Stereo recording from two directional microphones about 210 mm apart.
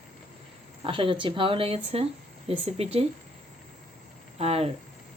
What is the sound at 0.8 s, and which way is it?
Speech, 25° right (ahead or behind).